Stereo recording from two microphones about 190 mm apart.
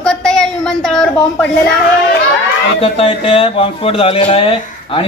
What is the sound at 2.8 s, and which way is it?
Speech, 30° left (ahead or behind).